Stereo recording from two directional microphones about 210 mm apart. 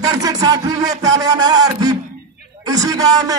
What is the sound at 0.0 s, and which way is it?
A man's voice, 20° right (ahead or behind).